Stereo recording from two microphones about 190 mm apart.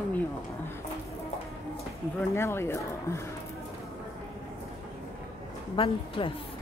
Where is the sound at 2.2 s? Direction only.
10° left (ahead or behind).